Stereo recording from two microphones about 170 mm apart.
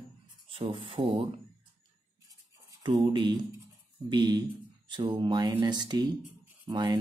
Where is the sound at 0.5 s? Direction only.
30° right (ahead or behind).